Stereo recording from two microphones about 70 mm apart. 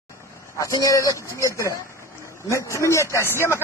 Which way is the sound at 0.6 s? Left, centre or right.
Left.